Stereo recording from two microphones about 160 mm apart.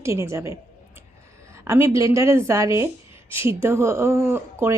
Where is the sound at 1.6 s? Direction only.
15° right (ahead or behind).